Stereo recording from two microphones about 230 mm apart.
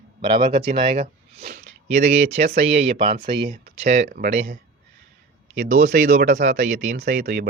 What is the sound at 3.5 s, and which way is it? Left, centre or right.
Speech, right.